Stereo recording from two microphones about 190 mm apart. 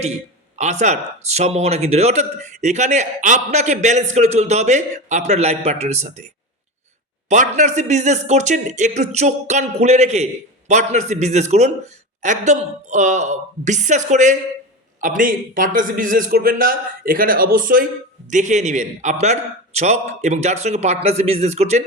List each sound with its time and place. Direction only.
0.6 s a man's voice: 35° right (ahead or behind)
7.3 s a man's voice: 40° right (ahead or behind)